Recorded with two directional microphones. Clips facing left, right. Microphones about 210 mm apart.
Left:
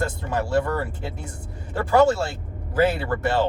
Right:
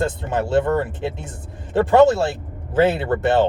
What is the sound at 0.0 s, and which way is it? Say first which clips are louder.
Speech: right 4 dB; 20° right (ahead or behind).